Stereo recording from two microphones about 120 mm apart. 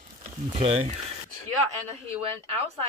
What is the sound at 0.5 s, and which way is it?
Speech, 55° right (ahead or behind).